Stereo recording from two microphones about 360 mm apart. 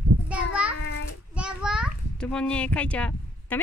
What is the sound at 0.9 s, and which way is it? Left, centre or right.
Child singing, left.